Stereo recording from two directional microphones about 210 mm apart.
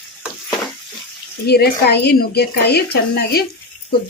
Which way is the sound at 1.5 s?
50° left (ahead or behind).